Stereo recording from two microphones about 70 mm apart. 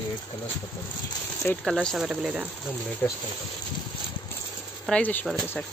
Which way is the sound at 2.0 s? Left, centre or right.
Centre.